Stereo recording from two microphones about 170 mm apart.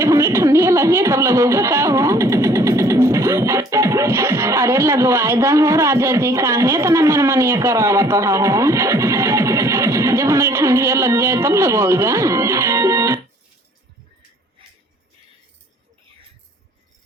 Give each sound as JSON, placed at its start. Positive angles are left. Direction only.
{"t": 0.0, "sound": "speech", "side_deg": -15}